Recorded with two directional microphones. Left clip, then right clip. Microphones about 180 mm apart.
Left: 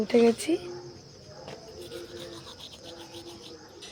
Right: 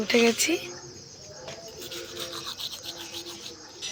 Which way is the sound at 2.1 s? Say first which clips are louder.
Right 7 dB; 20° left (ahead or behind).